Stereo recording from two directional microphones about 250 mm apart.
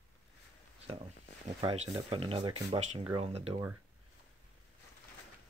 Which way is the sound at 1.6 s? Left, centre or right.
Right.